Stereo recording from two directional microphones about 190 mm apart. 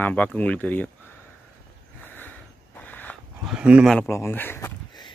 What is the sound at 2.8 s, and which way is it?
Dog, 10° left (ahead or behind).